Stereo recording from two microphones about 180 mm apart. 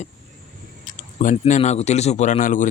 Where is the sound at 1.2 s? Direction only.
45° left (ahead or behind).